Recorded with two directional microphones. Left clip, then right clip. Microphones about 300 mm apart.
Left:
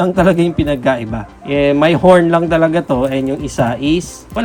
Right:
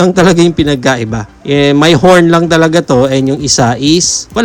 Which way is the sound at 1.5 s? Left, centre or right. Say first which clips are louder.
Right 4 dB; centre.